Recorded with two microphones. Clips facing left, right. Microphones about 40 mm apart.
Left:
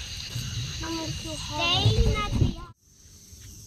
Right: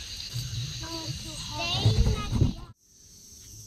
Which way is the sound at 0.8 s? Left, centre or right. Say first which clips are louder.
Left 9 dB; left.